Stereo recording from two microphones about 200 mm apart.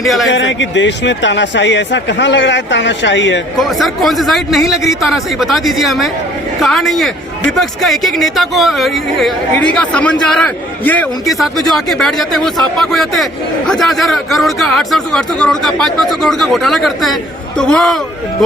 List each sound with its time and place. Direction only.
0.0 s speech: centre (ahead or behind)
0.3 s speech: 65° left (ahead or behind)
3.6 s speech: centre (ahead or behind)